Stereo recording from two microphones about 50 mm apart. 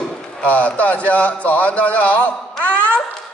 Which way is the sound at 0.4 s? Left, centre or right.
Left.